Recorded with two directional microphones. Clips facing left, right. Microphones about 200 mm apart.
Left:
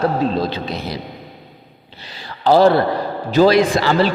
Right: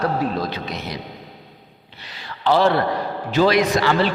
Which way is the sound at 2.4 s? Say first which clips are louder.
Left 5 dB; 40° left (ahead or behind).